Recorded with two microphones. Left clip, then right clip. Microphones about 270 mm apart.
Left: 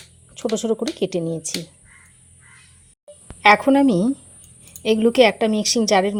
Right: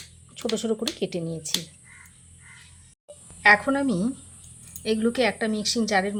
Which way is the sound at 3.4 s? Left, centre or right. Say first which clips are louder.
Left 5 dB; left.